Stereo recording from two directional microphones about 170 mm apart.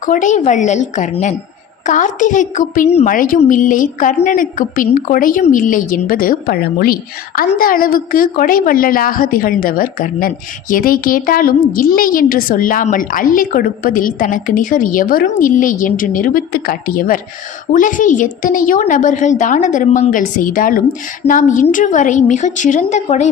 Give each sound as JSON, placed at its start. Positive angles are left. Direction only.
{"t": 0.0, "sound": "a woman's voice", "side_deg": 50}